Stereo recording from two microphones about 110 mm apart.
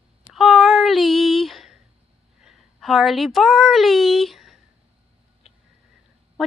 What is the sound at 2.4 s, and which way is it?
Speech, centre (ahead or behind).